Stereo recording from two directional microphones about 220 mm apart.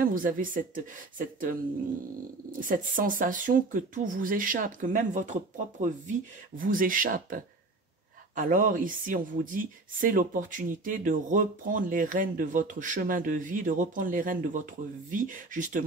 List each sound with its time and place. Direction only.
0.0 s speech: 40° right (ahead or behind)
2.7 s speech: 40° right (ahead or behind)